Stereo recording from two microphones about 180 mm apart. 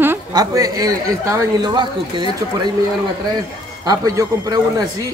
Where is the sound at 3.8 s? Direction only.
20° right (ahead or behind).